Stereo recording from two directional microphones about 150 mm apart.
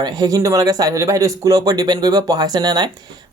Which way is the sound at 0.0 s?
25° right (ahead or behind).